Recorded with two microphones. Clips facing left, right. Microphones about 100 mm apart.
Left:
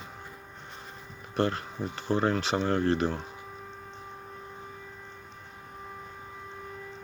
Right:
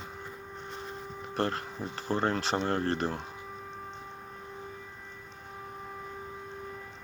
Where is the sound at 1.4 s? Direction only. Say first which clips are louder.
Left 3 dB; 35° right (ahead or behind).